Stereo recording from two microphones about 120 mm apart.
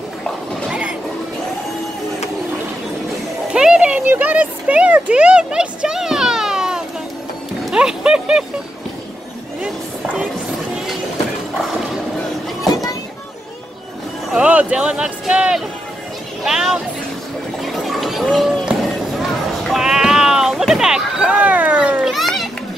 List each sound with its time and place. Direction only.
0.7 s vehicle: 10° right (ahead or behind)
3.5 s a sound: 10° right (ahead or behind)
7.7 s speech: 5° right (ahead or behind)
12.6 s a sound: 30° left (ahead or behind)
14.3 s speech: 10° right (ahead or behind)
17.6 s run: centre (ahead or behind)
19.6 s speech: 5° right (ahead or behind)